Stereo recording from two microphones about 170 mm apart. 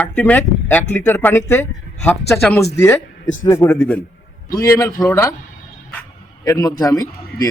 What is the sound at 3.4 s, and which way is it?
Speech, 15° left (ahead or behind).